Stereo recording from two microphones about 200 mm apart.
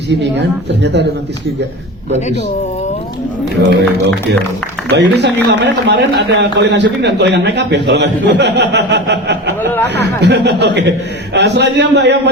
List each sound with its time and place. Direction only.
0.1 s a man's voice: 60° right (ahead or behind)
3.8 s a man's voice: 60° right (ahead or behind)